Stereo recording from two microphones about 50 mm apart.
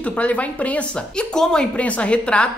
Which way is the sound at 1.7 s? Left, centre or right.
Left.